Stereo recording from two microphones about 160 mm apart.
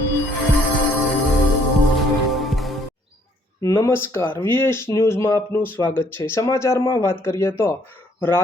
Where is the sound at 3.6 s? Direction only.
15° left (ahead or behind).